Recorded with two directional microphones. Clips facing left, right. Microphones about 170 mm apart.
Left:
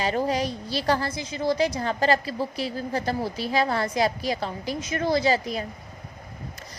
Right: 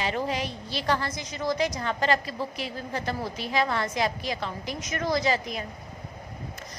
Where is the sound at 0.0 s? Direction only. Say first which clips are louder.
Left 4 dB; 40° left (ahead or behind).